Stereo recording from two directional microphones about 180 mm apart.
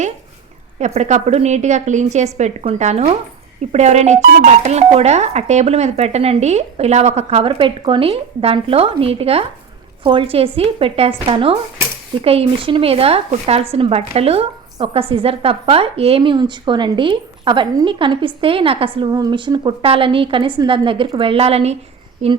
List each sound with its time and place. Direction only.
0.8 s speech: 40° right (ahead or behind)